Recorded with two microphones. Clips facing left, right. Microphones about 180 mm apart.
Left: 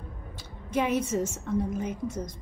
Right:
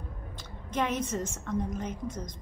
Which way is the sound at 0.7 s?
10° left (ahead or behind).